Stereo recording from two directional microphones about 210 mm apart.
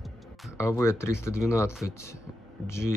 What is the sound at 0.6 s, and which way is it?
Speech, 15° left (ahead or behind).